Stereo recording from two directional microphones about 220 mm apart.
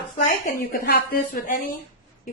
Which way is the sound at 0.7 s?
45° left (ahead or behind).